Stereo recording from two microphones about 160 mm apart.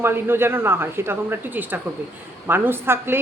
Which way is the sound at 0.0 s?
15° right (ahead or behind).